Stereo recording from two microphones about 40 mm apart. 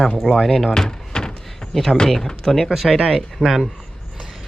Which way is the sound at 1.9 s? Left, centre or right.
Centre.